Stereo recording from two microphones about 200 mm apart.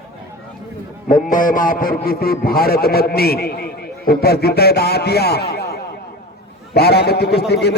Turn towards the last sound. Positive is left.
turn(degrees=55)  # may be behind; listen again after turning